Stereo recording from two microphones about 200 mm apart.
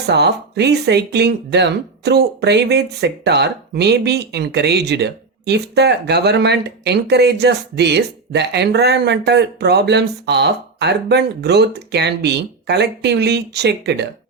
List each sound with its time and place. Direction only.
0.0 s speech: 55° right (ahead or behind)